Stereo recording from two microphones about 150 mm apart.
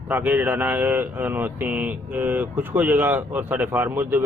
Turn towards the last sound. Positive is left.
turn(degrees=-15)  # may be behind; listen again after turning